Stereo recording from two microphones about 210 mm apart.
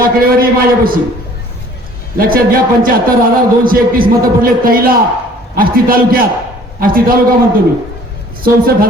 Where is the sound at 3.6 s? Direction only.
45° right (ahead or behind).